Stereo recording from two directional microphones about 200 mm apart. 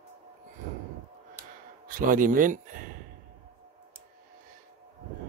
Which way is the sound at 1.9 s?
45° right (ahead or behind).